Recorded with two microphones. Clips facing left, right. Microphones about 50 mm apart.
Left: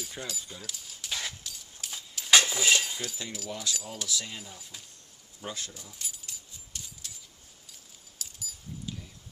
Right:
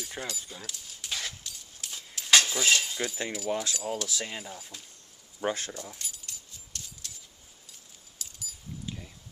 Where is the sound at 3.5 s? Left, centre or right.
Right.